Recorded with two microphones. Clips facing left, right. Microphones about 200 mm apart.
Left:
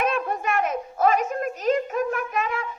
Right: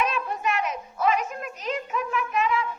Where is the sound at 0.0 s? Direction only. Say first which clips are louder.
Left 2 dB; 50° left (ahead or behind).